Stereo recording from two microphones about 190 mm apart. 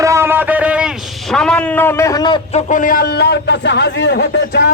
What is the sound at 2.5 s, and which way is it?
A man's voice, 40° left (ahead or behind).